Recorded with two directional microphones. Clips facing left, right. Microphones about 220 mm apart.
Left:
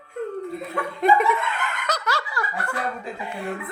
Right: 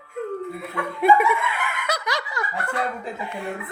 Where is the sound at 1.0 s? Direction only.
10° right (ahead or behind).